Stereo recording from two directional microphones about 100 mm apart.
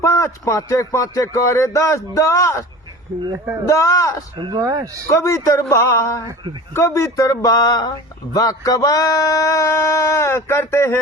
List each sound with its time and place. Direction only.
0.0 s speech: 30° left (ahead or behind)
3.7 s speech: 30° left (ahead or behind)
4.4 s speech: 45° right (ahead or behind)
4.6 s speech: 35° right (ahead or behind)
5.0 s speech: 30° left (ahead or behind)